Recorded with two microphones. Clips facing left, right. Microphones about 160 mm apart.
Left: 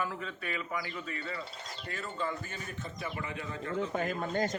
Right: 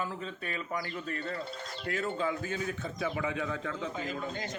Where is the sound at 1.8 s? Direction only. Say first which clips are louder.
Right 8 dB; 65° right (ahead or behind).